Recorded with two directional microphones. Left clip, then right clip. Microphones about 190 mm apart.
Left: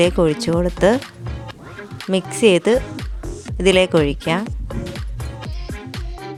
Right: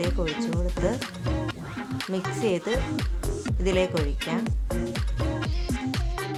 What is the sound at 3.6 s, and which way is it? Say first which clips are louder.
Speech: left 11 dB; 50° left (ahead or behind).